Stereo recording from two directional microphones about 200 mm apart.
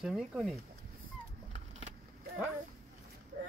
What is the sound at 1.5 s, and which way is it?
Vehicle, 35° right (ahead or behind).